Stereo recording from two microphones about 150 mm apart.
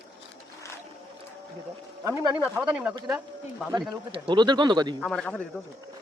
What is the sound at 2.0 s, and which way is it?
Speech, 20° right (ahead or behind).